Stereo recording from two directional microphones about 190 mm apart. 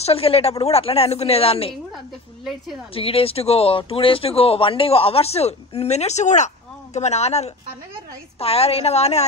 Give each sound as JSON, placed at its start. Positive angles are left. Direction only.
{"t": 0.0, "sound": "speech", "side_deg": 30}
{"t": 2.9, "sound": "speech", "side_deg": 30}